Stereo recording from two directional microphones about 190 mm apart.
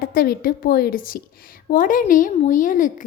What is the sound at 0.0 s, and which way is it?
A child's voice, 50° left (ahead or behind).